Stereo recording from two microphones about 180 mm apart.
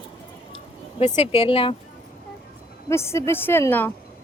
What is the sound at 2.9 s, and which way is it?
A woman's voice, 15° left (ahead or behind).